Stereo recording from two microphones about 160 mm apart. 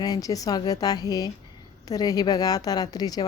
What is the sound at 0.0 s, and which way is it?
A woman's voice, 20° left (ahead or behind).